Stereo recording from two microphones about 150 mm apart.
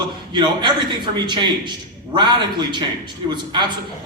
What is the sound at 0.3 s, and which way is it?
A man's voice, 30° right (ahead or behind).